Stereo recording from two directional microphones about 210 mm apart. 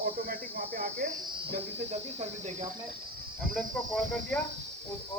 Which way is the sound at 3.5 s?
5° left (ahead or behind).